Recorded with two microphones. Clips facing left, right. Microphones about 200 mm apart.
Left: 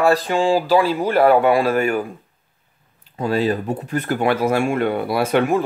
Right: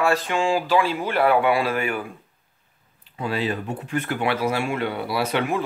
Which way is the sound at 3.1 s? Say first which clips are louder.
Left 6 dB; 40° left (ahead or behind).